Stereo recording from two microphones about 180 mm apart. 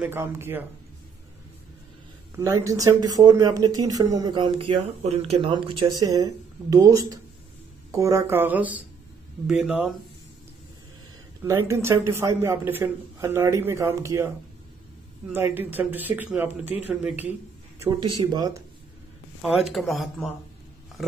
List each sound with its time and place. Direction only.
0.0 s a man's voice: 15° right (ahead or behind)
2.3 s a man's voice: 20° right (ahead or behind)
11.4 s a man's voice: 15° right (ahead or behind)
15.3 s a man's voice: 10° right (ahead or behind)
18.0 s speech: 25° right (ahead or behind)
19.4 s speech: centre (ahead or behind)